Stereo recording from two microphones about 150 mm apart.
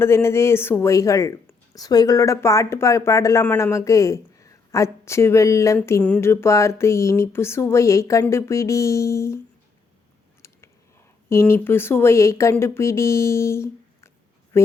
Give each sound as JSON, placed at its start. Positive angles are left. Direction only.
{"t": 0.0, "sound": "speech", "side_deg": 15}
{"t": 11.3, "sound": "speech", "side_deg": 15}